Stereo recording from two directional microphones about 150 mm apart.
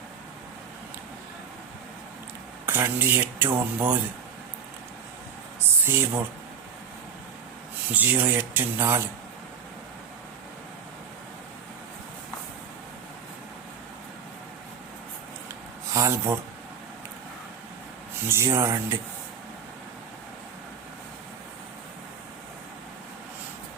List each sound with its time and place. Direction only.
2.6 s speech: 15° right (ahead or behind)
5.8 s speech: 15° right (ahead or behind)
7.9 s speech: 10° right (ahead or behind)
15.9 s speech: 20° right (ahead or behind)
18.1 s speech: 15° right (ahead or behind)